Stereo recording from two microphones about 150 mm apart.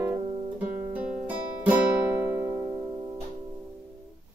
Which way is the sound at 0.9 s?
10° right (ahead or behind).